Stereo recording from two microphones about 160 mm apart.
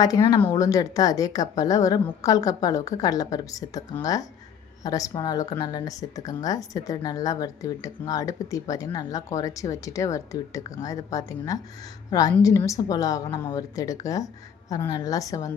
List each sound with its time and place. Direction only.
0.0 s speech: 25° left (ahead or behind)